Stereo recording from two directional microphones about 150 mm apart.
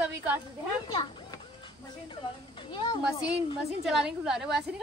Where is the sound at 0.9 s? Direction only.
30° left (ahead or behind).